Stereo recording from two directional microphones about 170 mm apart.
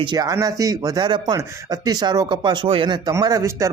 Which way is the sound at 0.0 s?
25° right (ahead or behind).